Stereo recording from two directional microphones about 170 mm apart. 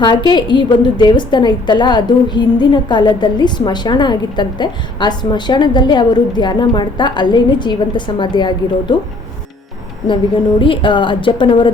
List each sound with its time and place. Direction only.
0.0 s a woman's voice: 25° left (ahead or behind)
10.6 s a woman's voice: 30° left (ahead or behind)